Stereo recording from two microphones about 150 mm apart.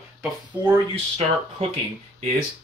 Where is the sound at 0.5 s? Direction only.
15° right (ahead or behind).